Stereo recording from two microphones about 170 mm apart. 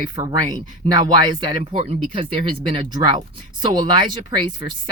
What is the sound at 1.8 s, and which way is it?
Speech, 35° right (ahead or behind).